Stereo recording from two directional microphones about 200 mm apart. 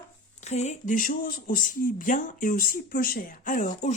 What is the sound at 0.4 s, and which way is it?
Speech, 35° left (ahead or behind).